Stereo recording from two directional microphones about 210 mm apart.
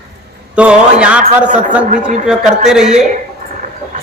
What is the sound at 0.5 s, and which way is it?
A man's voice, 5° right (ahead or behind).